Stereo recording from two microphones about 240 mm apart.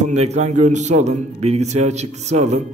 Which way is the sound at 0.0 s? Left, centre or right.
Right.